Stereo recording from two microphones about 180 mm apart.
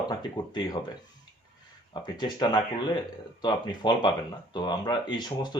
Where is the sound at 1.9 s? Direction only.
25° left (ahead or behind).